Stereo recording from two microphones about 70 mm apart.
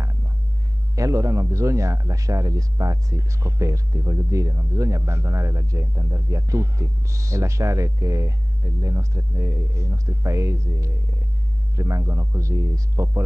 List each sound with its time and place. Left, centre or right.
0.9 s a man's voice: right